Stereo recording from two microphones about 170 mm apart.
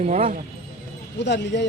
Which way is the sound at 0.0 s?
40° right (ahead or behind).